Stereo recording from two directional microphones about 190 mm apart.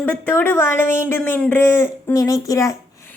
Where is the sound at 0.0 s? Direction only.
10° left (ahead or behind).